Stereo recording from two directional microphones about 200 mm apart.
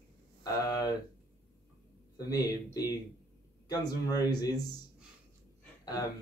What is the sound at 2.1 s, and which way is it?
Speech, 20° left (ahead or behind).